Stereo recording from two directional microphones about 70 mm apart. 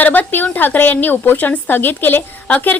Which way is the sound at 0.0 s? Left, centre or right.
Left.